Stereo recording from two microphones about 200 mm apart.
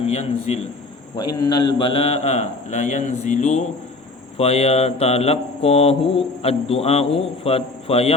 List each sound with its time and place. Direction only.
0.0 s mantra: 30° left (ahead or behind)